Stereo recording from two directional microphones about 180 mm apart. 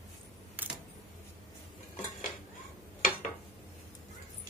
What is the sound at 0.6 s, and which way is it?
Keys jangling, 10° right (ahead or behind).